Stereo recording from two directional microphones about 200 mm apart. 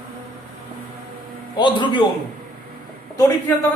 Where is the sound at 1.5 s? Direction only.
20° left (ahead or behind).